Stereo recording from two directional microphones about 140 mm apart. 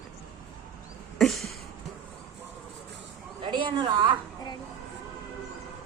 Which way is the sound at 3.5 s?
35° right (ahead or behind).